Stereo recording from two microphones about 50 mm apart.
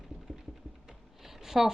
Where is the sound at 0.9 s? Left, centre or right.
Centre.